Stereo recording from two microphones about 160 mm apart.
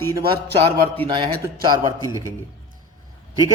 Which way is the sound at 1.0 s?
30° right (ahead or behind).